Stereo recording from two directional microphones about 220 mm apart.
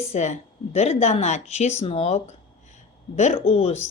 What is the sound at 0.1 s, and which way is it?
A woman's voice, 30° left (ahead or behind).